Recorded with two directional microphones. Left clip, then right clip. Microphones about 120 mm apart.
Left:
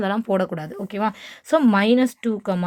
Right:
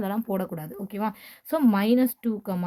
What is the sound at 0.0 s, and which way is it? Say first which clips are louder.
Speech: left 8 dB; 20° left (ahead or behind).